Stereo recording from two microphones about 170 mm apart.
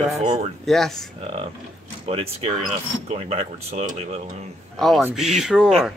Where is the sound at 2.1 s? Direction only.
35° right (ahead or behind).